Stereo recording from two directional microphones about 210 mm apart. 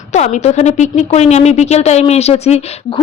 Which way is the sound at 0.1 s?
35° left (ahead or behind).